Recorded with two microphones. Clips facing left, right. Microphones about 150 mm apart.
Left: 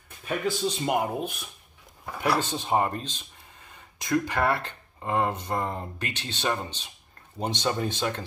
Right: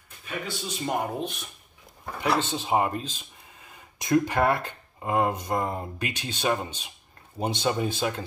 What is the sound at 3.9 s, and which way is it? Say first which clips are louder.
Speech: right 3 dB; 20° right (ahead or behind).